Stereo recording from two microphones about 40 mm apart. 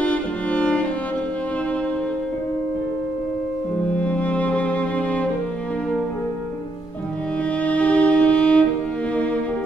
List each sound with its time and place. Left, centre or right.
0.0 s music: left
3.9 s music: left
7.6 s music: left